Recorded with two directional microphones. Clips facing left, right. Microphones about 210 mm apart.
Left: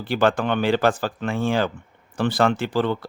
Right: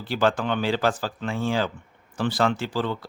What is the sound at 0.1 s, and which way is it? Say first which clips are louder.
Speech: left 3 dB; 55° left (ahead or behind).